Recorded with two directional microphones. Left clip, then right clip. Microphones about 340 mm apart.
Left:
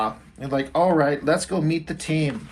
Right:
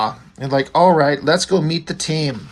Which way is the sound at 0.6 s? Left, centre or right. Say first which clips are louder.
Right 6 dB; right.